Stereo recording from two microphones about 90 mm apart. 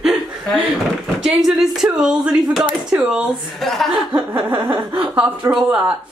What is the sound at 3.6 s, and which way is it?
Speech, 5° left (ahead or behind).